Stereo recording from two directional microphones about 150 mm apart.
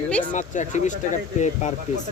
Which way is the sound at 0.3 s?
55° left (ahead or behind).